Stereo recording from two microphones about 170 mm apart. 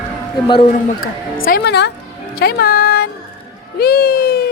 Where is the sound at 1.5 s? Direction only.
75° left (ahead or behind).